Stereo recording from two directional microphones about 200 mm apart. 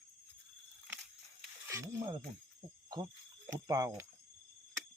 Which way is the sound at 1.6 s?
15° right (ahead or behind).